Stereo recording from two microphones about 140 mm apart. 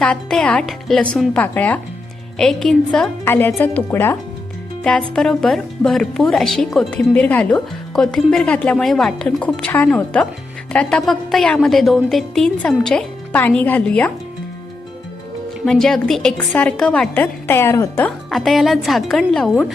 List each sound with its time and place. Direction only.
0.0 s speech: 5° left (ahead or behind)
3.2 s speech: 15° left (ahead or behind)
4.8 s speech: 5° left (ahead or behind)
15.6 s speech: 5° left (ahead or behind)
17.5 s speech: 15° left (ahead or behind)
18.3 s speech: centre (ahead or behind)